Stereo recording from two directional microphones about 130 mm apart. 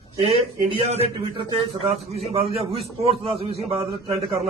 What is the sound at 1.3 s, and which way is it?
A man's voice, 50° right (ahead or behind).